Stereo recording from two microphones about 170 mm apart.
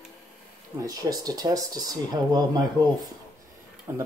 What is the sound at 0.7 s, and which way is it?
Speech, 20° right (ahead or behind).